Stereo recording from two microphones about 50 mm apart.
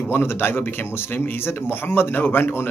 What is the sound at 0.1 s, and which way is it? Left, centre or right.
Speech, left.